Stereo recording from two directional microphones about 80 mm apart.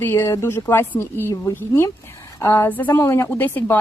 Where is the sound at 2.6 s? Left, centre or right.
Left.